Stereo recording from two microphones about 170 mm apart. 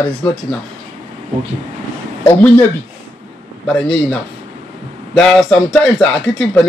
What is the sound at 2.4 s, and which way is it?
Speech, 10° left (ahead or behind).